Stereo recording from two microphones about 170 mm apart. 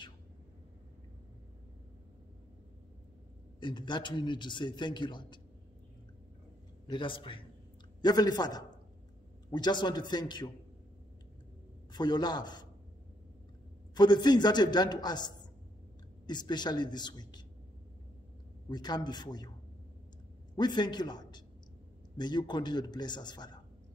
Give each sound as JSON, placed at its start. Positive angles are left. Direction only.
{"t": 3.5, "sound": "a man's voice", "side_deg": 25}
{"t": 6.9, "sound": "a man's voice", "side_deg": 30}
{"t": 11.9, "sound": "a man's voice", "side_deg": 25}
{"t": 13.9, "sound": "a man's voice", "side_deg": 25}
{"t": 18.7, "sound": "a man's voice", "side_deg": 25}
{"t": 20.5, "sound": "a man's voice", "side_deg": 25}